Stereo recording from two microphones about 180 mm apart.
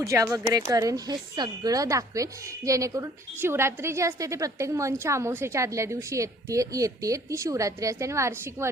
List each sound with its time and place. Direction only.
0.0 s speech: 15° right (ahead or behind)